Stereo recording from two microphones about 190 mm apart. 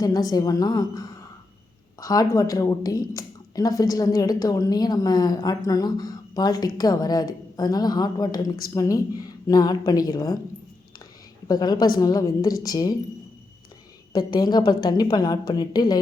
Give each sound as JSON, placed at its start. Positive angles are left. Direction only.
{"t": 0.0, "sound": "a woman's voice", "side_deg": 20}
{"t": 11.4, "sound": "a woman's voice", "side_deg": 20}
{"t": 14.1, "sound": "a woman's voice", "side_deg": 20}